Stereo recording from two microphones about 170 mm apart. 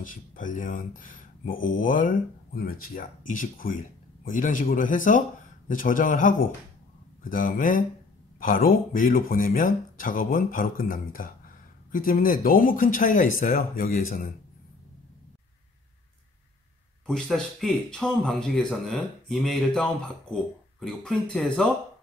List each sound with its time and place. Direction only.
0.0 s speech: 50° left (ahead or behind)
17.0 s speech: 5° left (ahead or behind)